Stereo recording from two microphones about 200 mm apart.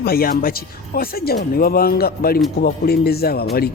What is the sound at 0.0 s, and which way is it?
Speech, 50° left (ahead or behind).